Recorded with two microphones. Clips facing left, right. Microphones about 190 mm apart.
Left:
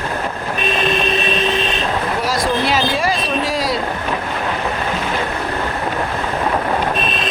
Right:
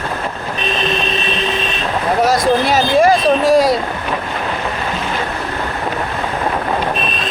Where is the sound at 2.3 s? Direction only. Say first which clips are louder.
Right 3 dB; 45° right (ahead or behind).